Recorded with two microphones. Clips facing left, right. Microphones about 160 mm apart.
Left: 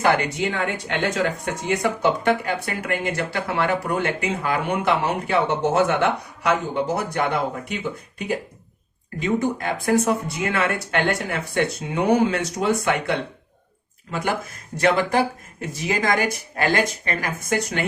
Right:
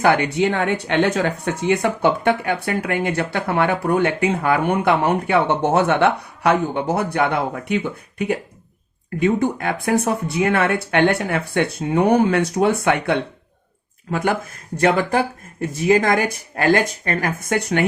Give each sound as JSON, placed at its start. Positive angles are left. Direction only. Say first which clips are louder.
{"t": 0.0, "sound": "speech", "louder": "right 4 dB", "side_deg": -60}
{"t": 9.1, "sound": "speech", "louder": "right 4 dB", "side_deg": -55}
{"t": 14.8, "sound": "speech", "louder": "right 2 dB", "side_deg": -50}